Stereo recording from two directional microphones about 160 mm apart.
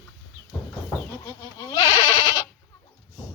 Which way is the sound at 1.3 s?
20° left (ahead or behind).